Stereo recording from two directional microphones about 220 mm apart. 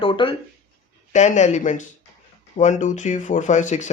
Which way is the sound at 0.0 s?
25° left (ahead or behind).